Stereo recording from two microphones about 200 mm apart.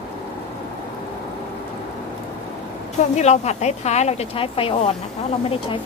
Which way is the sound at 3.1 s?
35° left (ahead or behind).